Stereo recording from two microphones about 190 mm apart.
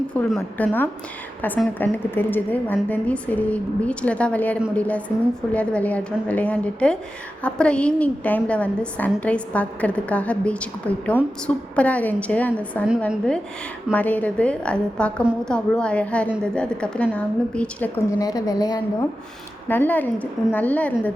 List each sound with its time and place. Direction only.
0.1 s a woman's voice: 5° left (ahead or behind)